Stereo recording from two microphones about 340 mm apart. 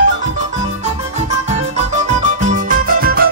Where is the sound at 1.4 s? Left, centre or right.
Centre.